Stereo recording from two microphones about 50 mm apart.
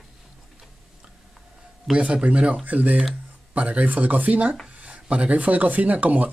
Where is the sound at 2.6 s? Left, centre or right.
Right.